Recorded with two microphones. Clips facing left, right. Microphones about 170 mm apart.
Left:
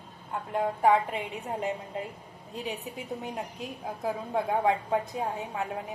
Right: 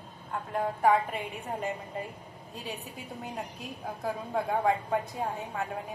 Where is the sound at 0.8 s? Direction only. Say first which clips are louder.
Left 1 dB; 20° left (ahead or behind).